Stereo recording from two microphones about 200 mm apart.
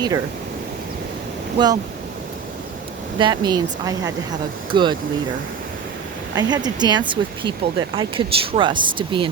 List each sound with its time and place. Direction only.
1.5 s speech: 20° right (ahead or behind)
3.2 s speech: 20° right (ahead or behind)
6.3 s speech: 20° right (ahead or behind)